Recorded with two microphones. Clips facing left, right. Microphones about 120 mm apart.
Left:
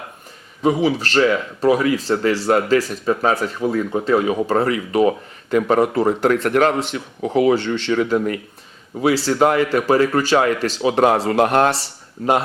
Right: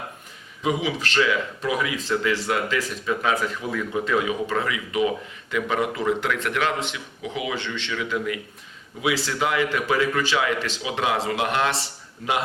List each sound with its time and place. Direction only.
0.6 s speech: 40° left (ahead or behind)